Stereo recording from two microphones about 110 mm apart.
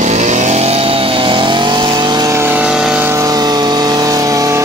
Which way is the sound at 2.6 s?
10° right (ahead or behind).